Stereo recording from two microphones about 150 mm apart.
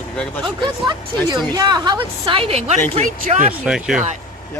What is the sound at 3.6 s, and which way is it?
Speech, 5° right (ahead or behind).